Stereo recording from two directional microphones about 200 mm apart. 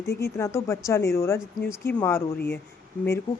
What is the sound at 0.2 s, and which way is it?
A woman's voice, 15° left (ahead or behind).